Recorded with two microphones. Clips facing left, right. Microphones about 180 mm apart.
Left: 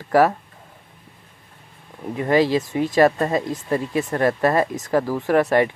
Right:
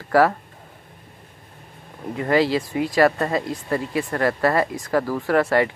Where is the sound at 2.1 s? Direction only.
20° left (ahead or behind).